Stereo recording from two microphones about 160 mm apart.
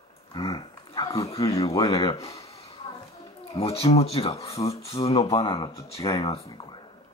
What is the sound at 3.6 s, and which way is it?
Speech, 40° left (ahead or behind).